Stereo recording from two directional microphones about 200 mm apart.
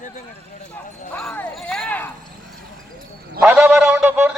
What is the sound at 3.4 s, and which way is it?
Speech, 10° right (ahead or behind).